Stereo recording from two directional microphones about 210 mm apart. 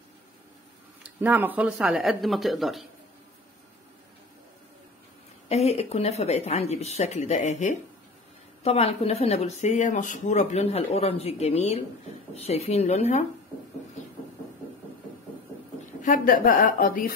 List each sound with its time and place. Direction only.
1.0 s speech: 10° right (ahead or behind)
5.5 s speech: 30° left (ahead or behind)
16.0 s speech: 40° left (ahead or behind)